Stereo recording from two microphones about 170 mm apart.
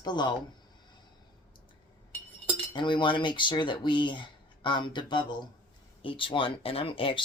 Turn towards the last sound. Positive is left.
turn(degrees=30)  # may be behind; listen again after turning